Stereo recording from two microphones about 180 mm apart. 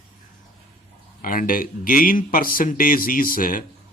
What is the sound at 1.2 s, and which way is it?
Speech, 50° left (ahead or behind).